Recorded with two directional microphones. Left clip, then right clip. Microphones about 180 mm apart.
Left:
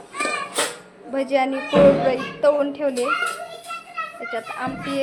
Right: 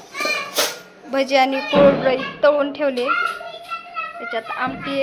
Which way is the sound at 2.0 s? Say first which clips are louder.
Right 2 dB; 10° left (ahead or behind).